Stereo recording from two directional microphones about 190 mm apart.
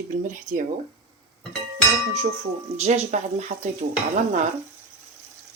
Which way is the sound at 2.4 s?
35° right (ahead or behind).